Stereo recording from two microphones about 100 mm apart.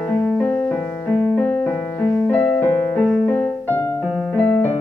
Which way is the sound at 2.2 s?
15° left (ahead or behind).